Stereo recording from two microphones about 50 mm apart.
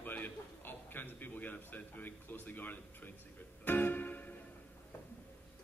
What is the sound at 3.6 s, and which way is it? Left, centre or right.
Music, left.